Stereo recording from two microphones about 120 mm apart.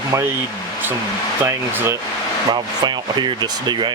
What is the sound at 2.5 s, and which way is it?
Speech, 40° right (ahead or behind).